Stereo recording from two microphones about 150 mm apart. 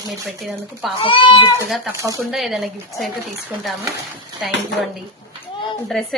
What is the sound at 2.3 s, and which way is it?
Speech, centre (ahead or behind).